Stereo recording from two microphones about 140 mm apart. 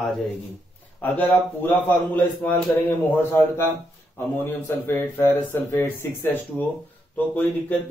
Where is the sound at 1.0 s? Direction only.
10° left (ahead or behind).